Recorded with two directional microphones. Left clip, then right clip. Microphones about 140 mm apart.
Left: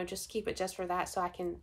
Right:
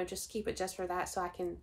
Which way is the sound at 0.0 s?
20° left (ahead or behind).